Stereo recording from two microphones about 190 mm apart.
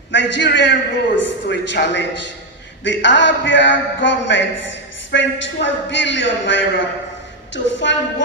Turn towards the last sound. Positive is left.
turn(degrees=70)  # may be behind; listen again after turning